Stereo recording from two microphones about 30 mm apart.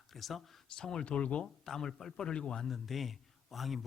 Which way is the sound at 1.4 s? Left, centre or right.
Centre.